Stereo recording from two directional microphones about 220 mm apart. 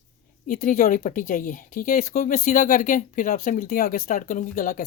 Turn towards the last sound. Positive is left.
turn(degrees=35)  # may be behind; listen again after turning